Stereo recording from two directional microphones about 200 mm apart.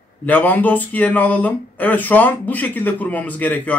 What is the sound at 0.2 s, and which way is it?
Speech, 10° left (ahead or behind).